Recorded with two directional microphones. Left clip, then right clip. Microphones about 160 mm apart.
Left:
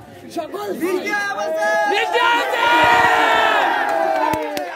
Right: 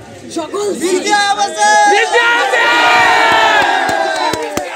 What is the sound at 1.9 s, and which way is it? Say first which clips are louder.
Speech: right 6 dB; centre (ahead or behind).